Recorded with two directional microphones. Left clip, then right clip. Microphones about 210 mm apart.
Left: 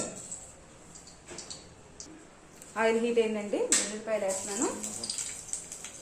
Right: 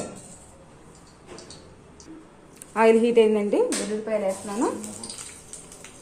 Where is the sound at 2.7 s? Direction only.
50° right (ahead or behind).